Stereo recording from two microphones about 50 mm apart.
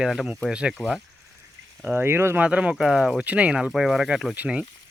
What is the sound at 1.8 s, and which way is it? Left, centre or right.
Speech, right.